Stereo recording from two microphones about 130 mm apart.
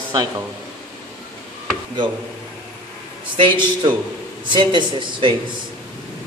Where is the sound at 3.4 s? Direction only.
35° right (ahead or behind).